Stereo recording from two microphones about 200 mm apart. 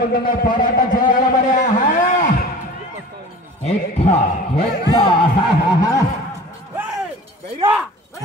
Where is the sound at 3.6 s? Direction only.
30° left (ahead or behind).